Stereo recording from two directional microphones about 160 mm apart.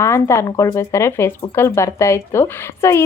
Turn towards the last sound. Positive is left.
turn(degrees=15)  # may be behind; listen again after turning